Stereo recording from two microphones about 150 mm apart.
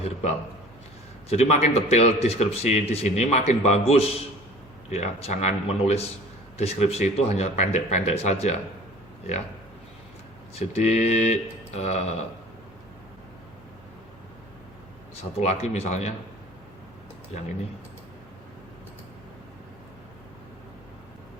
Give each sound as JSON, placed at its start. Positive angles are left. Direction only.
{"t": 0.0, "sound": "a man's voice", "side_deg": 45}
{"t": 10.6, "sound": "a man's voice", "side_deg": 45}
{"t": 15.2, "sound": "a man's voice", "side_deg": 50}
{"t": 17.3, "sound": "a man's voice", "side_deg": 50}